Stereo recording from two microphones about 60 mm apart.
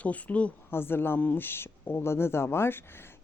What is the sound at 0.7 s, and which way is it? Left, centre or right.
Speech, left.